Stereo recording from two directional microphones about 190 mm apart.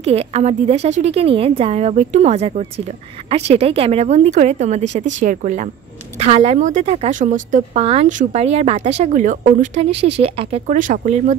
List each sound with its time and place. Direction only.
0.0 s a woman's voice: 35° right (ahead or behind)
9.8 s speech: 65° right (ahead or behind)
10.2 s a woman's voice: 30° right (ahead or behind)